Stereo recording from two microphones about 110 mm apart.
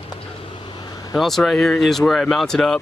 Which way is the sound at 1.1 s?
Centre (ahead or behind).